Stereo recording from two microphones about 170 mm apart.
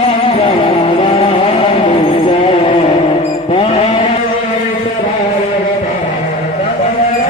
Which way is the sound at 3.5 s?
30° left (ahead or behind).